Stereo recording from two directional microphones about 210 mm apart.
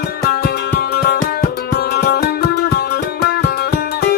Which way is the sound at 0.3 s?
50° left (ahead or behind).